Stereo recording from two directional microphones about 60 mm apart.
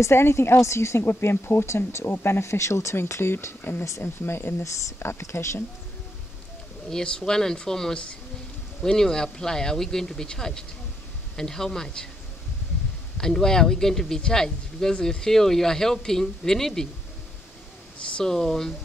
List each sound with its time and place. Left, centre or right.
0.0 s speech: left
3.8 s speech: left
4.2 s speech: left
6.9 s speech: centre
13.2 s speech: centre
18.0 s speech: centre